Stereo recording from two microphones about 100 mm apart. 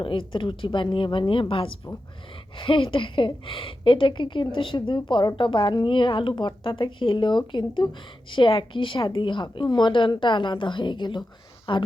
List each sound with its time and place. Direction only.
0.0 s a woman's voice: 60° left (ahead or behind)